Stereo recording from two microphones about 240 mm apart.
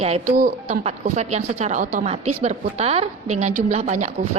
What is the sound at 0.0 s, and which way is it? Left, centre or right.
Speech, right.